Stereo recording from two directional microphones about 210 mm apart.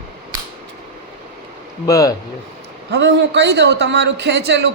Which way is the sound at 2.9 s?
55° right (ahead or behind).